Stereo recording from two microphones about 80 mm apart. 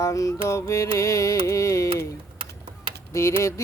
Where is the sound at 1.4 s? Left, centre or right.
Left.